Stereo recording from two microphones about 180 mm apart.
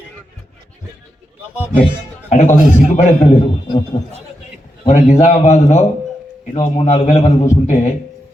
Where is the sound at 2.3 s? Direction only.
40° left (ahead or behind).